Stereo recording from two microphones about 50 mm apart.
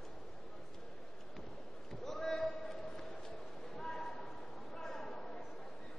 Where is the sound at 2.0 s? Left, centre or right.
Centre.